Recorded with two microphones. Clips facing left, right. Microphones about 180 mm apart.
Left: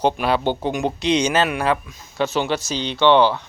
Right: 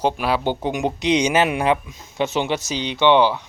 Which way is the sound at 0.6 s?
15° right (ahead or behind).